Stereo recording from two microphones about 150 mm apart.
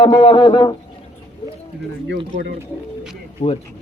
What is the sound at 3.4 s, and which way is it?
Speech, 45° left (ahead or behind).